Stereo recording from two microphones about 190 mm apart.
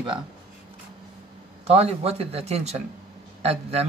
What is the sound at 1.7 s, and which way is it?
Speech, 35° right (ahead or behind).